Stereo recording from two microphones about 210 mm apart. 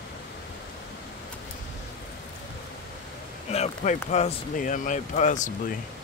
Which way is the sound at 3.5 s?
35° left (ahead or behind).